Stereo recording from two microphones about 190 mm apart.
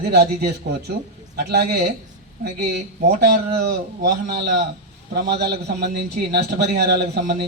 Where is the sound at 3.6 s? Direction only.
55° right (ahead or behind).